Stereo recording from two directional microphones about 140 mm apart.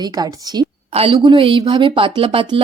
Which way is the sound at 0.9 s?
45° right (ahead or behind).